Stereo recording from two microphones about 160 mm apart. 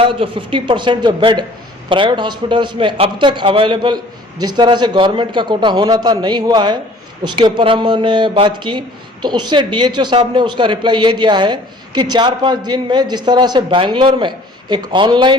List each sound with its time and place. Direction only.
0.0 s a man's voice: 35° right (ahead or behind)